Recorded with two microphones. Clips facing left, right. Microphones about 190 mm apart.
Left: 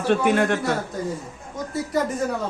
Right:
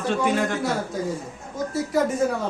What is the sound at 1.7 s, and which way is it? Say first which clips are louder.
Speech: right 1 dB; centre (ahead or behind).